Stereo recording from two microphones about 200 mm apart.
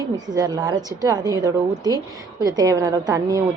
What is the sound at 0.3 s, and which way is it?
A woman's voice, 20° right (ahead or behind).